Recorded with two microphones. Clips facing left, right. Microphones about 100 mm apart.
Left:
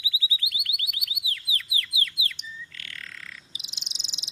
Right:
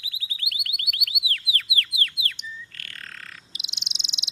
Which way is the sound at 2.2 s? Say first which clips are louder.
Right 2 dB; 60° right (ahead or behind).